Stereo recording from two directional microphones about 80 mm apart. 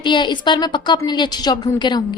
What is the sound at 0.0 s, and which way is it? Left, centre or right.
A woman's voice, left.